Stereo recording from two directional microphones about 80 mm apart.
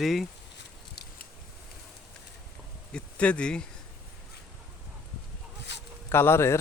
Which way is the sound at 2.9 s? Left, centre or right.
Centre.